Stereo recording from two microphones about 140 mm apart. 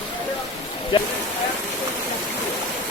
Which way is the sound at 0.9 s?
35° left (ahead or behind).